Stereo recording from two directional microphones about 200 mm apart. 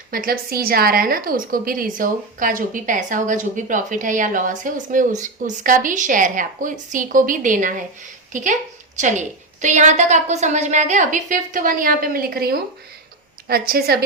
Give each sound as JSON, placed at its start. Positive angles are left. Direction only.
{"t": 0.1, "sound": "a woman's voice", "side_deg": -50}